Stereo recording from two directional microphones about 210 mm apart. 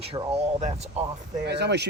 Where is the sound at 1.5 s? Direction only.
55° right (ahead or behind).